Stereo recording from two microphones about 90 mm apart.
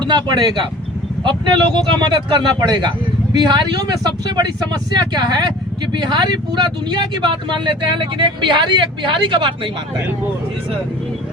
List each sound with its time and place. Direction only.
0.0 s speech: 55° right (ahead or behind)